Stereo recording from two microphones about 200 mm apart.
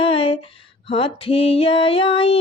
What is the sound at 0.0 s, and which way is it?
Female singing, 30° left (ahead or behind).